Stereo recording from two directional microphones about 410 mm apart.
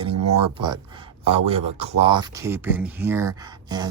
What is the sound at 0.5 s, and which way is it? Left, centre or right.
Speech, centre.